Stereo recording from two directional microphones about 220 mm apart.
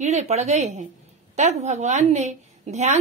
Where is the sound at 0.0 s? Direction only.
30° right (ahead or behind).